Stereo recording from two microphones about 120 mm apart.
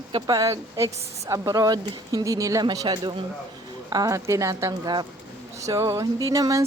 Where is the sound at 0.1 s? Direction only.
30° right (ahead or behind).